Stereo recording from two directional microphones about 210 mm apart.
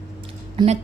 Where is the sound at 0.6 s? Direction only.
20° right (ahead or behind).